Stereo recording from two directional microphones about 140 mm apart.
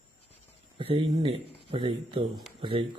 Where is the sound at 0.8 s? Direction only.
45° right (ahead or behind).